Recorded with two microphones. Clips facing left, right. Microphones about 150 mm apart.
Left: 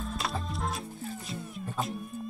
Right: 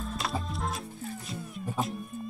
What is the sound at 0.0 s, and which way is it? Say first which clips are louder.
Music: right 1 dB; centre (ahead or behind).